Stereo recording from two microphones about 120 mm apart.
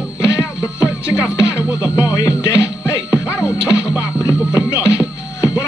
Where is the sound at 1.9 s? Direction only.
30° left (ahead or behind).